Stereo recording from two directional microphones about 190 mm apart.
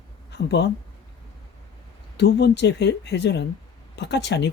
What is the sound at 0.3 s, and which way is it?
Speech, 65° left (ahead or behind).